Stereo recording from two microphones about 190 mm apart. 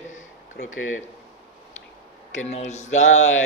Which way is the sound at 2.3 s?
35° left (ahead or behind).